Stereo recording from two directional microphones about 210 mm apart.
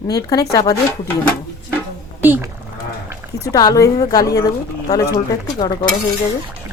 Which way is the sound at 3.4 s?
15° left (ahead or behind).